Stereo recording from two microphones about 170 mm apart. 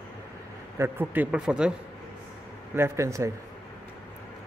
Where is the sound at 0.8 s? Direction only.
10° right (ahead or behind).